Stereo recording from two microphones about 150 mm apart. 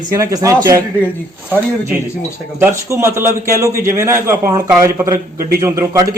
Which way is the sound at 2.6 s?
20° right (ahead or behind).